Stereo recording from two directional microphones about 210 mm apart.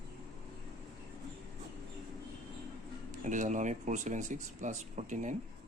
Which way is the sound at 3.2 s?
35° right (ahead or behind).